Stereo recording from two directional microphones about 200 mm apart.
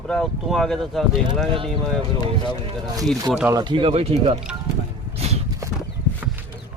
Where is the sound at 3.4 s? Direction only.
20° right (ahead or behind).